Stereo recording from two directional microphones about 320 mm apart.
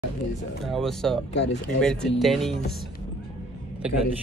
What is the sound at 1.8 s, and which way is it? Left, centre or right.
Speech, centre.